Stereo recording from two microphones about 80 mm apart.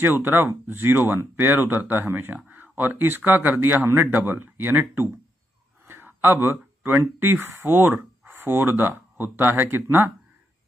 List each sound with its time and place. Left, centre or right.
0.0 s speech: right